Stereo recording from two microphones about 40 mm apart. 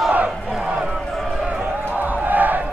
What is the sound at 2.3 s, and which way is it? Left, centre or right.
Crowd, right.